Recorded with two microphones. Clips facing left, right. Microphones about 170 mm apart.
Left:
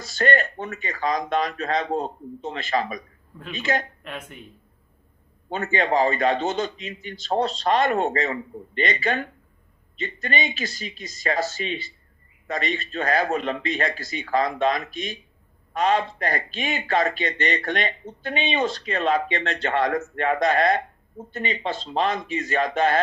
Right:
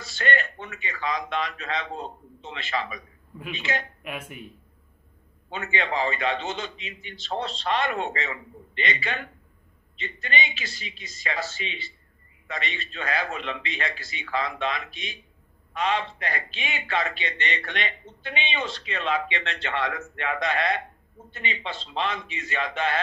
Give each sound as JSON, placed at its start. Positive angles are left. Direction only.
{"t": 0.0, "sound": "a man's voice", "side_deg": 40}
{"t": 4.0, "sound": "speech", "side_deg": -10}
{"t": 5.5, "sound": "a man's voice", "side_deg": 40}